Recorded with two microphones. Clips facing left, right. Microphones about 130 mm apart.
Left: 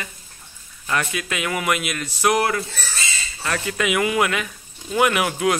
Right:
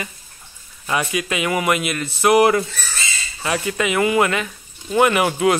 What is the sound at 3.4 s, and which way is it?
A man's voice, 5° right (ahead or behind).